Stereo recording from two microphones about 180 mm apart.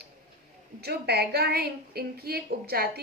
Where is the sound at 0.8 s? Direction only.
65° right (ahead or behind).